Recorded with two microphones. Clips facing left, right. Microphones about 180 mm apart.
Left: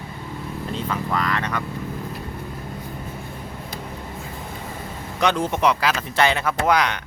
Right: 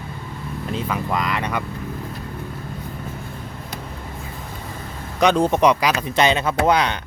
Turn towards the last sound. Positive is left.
turn(degrees=-30)  # may be behind; listen again after turning